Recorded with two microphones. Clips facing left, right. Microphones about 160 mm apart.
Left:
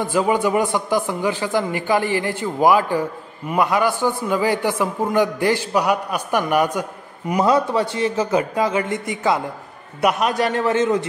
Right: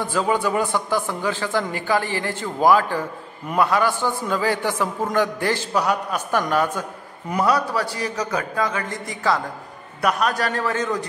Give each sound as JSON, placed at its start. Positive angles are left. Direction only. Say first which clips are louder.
{"t": 0.0, "sound": "a man's voice", "louder": "left 3 dB", "side_deg": 15}
{"t": 8.9, "sound": "a man's voice", "louder": "left 6 dB", "side_deg": 0}
{"t": 10.0, "sound": "a man's voice", "louder": "left 3 dB", "side_deg": 20}